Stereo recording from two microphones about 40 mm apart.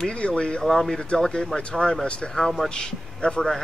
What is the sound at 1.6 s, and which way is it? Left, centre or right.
Speech, left.